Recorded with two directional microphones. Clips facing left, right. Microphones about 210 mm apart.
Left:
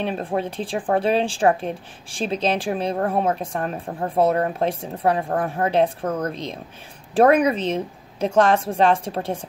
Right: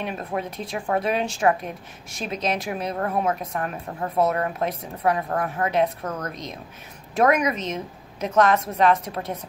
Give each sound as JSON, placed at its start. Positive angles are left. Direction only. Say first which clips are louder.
{"t": 0.0, "sound": "speech", "louder": "left 4 dB", "side_deg": 30}